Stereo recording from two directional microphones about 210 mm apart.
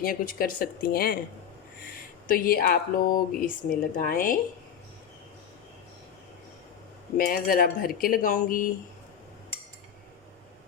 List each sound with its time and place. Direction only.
0.0 s speech: 45° left (ahead or behind)
2.2 s speech: 45° left (ahead or behind)
7.2 s speech: 45° left (ahead or behind)